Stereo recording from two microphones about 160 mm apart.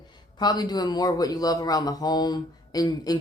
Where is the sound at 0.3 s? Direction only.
25° left (ahead or behind).